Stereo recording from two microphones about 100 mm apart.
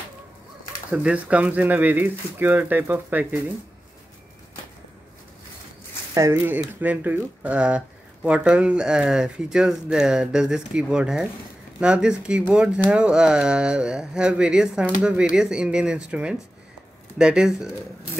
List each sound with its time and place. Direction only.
0.9 s speech: 15° right (ahead or behind)
6.1 s speech: 25° right (ahead or behind); by 17.6 s 5° right (ahead or behind)